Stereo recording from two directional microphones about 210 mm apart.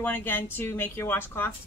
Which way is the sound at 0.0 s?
10° left (ahead or behind).